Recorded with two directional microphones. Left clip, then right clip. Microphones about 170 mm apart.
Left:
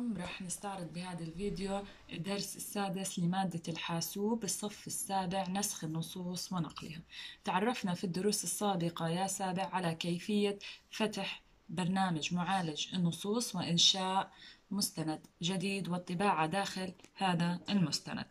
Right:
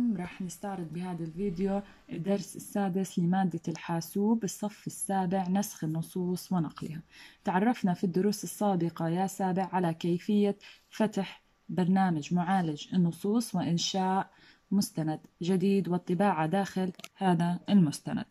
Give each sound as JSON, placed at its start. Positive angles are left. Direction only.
{"t": 0.5, "sound": "a woman's voice", "side_deg": -35}
{"t": 7.4, "sound": "a woman's voice", "side_deg": -35}